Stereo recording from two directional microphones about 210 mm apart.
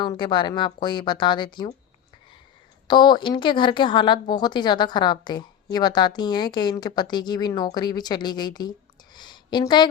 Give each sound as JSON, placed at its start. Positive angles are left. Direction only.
{"t": 0.0, "sound": "a woman's voice", "side_deg": 20}
{"t": 2.8, "sound": "a woman's voice", "side_deg": 20}